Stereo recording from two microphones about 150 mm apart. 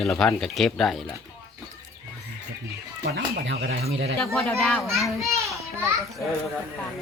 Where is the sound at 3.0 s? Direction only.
90° right.